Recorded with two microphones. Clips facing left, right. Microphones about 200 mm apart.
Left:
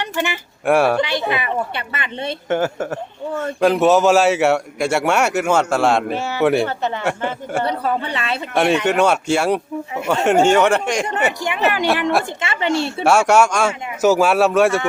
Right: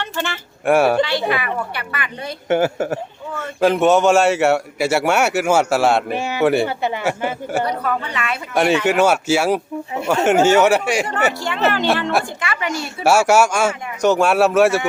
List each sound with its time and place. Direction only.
0.0 s speech: 15° left (ahead or behind)
0.6 s a man's voice: centre (ahead or behind)
1.3 s speech: 20° left (ahead or behind)
2.5 s a woman's voice: 10° right (ahead or behind)
6.1 s speech: 15° right (ahead or behind)
6.4 s a man's voice: centre (ahead or behind)
7.6 s speech: 30° left (ahead or behind)
8.5 s a man's voice: centre (ahead or behind)
11.3 s speech: 15° left (ahead or behind)
12.4 s speech: 25° left (ahead or behind)
13.1 s a man's voice: 5° right (ahead or behind)